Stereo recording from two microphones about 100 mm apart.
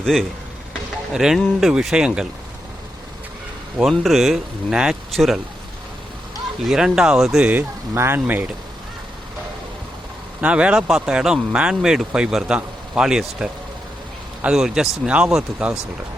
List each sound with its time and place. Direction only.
0.0 s speech: centre (ahead or behind)
3.8 s speech: centre (ahead or behind)
6.7 s speech: 5° right (ahead or behind)
7.9 s speech: 25° right (ahead or behind)
10.4 s a man's voice: 10° right (ahead or behind)